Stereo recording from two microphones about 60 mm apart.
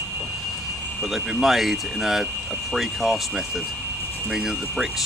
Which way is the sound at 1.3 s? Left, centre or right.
Centre.